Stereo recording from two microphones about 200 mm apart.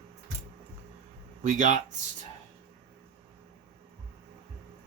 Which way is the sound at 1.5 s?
40° right (ahead or behind).